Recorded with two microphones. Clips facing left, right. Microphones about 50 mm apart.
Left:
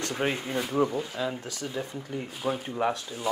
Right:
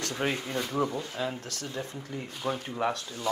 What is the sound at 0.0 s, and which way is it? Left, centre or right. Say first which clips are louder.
A man's voice: left 2 dB; centre.